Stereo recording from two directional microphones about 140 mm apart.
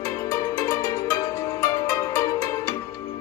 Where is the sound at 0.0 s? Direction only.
20° left (ahead or behind).